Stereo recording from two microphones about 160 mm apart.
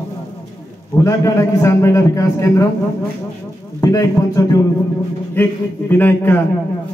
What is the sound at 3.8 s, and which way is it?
A man's voice, 20° left (ahead or behind).